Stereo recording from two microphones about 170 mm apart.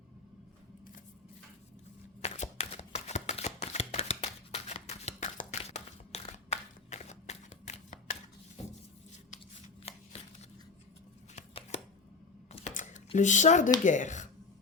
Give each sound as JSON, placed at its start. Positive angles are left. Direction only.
{"t": 2.2, "sound": "shuffling cards", "side_deg": 40}
{"t": 9.9, "sound": "shuffling cards", "side_deg": 35}
{"t": 11.3, "sound": "a sound", "side_deg": 40}
{"t": 12.5, "sound": "typing", "side_deg": 45}
{"t": 13.1, "sound": "speech", "side_deg": 45}